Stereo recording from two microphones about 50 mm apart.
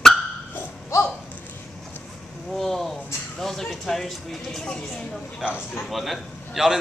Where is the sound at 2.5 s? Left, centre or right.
Centre.